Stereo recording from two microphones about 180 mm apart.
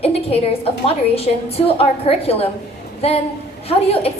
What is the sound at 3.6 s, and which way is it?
Speech, 35° left (ahead or behind).